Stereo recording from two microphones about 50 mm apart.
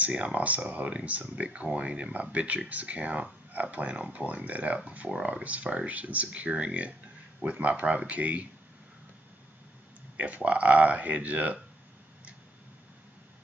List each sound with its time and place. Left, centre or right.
0.0 s speech: right
10.1 s speech: right